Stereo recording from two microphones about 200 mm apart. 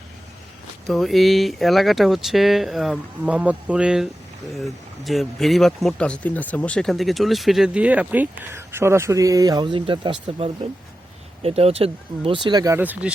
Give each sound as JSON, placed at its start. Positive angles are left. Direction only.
{"t": 0.9, "sound": "speech", "side_deg": 0}